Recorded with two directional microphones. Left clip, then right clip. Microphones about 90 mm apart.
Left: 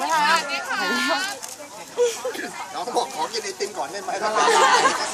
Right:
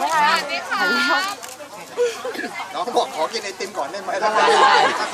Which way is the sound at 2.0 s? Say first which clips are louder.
Right 1 dB; 35° right (ahead or behind).